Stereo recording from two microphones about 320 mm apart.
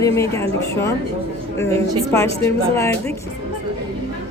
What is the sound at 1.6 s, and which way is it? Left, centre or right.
Speech, centre.